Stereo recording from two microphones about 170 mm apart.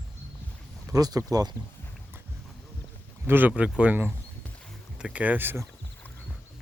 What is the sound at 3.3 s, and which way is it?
Speech, 10° right (ahead or behind).